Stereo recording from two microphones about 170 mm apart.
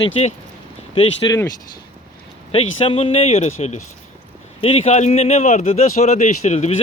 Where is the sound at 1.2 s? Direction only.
25° left (ahead or behind).